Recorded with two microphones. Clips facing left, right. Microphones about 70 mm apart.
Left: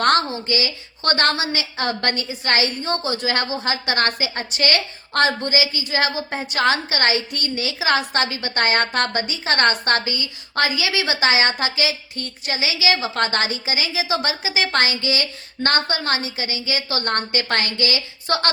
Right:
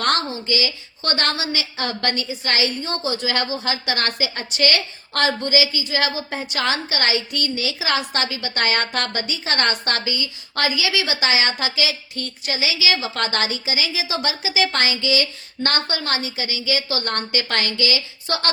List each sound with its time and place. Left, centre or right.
0.0 s a woman's voice: left